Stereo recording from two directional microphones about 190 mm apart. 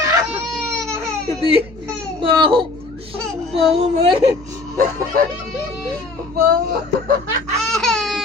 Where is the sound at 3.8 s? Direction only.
30° right (ahead or behind).